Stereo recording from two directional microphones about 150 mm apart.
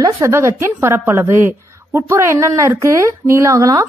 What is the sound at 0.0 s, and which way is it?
A woman's voice, 20° right (ahead or behind).